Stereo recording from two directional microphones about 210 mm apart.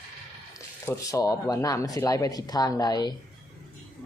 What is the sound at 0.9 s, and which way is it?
Speech, 15° left (ahead or behind).